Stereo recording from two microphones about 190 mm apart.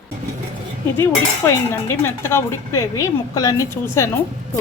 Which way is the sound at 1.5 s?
15° left (ahead or behind).